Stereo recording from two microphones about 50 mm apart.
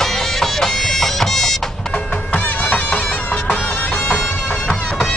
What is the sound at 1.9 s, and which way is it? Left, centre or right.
Bagpipes, left.